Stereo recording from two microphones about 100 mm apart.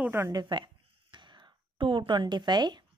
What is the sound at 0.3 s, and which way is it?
A woman's voice, 45° right (ahead or behind).